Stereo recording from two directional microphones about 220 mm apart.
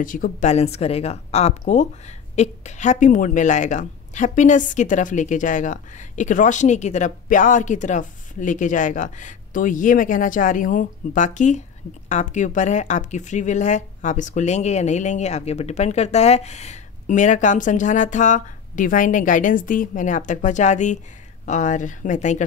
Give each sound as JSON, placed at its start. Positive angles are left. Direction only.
{"t": 0.0, "sound": "speech", "side_deg": 35}